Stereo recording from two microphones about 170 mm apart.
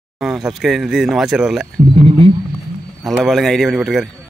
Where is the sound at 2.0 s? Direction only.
35° right (ahead or behind).